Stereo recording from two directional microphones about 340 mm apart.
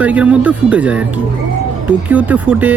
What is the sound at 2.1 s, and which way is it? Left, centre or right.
Speech, centre.